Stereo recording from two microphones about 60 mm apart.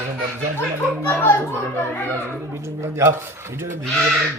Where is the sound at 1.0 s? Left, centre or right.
Left.